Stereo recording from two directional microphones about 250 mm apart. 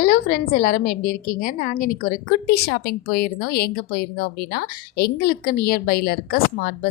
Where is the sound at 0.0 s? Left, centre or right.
Left.